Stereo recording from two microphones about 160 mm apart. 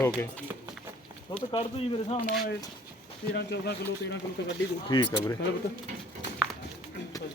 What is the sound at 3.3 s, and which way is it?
Speech, 90° left.